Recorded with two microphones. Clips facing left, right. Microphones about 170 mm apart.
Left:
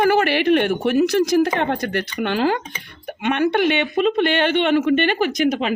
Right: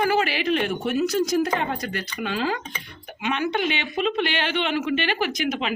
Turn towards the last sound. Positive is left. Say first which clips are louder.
# left 6 dB
turn(degrees=45)  # may be behind; listen again after turning